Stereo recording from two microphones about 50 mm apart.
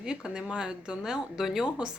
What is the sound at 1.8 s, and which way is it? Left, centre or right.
Speech, centre.